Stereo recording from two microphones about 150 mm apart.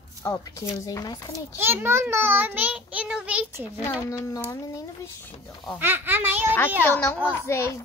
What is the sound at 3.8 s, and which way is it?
Speech, 15° left (ahead or behind).